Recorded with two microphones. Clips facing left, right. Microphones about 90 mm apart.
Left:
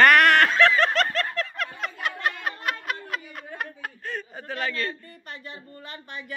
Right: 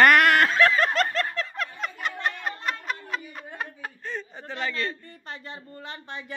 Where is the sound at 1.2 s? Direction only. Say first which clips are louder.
Left 1 dB; centre (ahead or behind).